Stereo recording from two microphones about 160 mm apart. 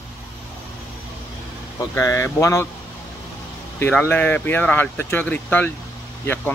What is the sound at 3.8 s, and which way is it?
Speech, 10° left (ahead or behind).